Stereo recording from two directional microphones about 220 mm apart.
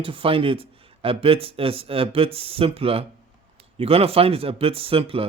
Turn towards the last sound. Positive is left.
turn(degrees=-25)  # may be behind; listen again after turning